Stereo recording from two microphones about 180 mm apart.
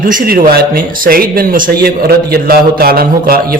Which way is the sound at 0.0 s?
50° right (ahead or behind).